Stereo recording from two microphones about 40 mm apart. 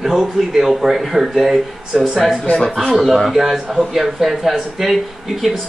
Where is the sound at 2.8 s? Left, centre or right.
Centre.